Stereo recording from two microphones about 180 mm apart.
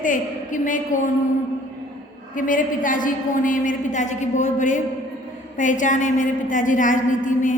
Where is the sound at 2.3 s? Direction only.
50° left (ahead or behind).